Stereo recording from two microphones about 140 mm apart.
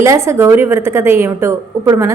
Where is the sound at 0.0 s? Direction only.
20° right (ahead or behind).